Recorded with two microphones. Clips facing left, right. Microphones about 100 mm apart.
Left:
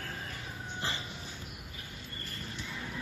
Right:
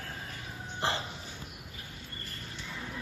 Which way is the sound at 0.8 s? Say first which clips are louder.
Right 6 dB; 75° right (ahead or behind).